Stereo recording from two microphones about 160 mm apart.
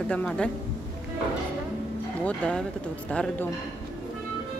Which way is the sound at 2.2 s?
5° left (ahead or behind).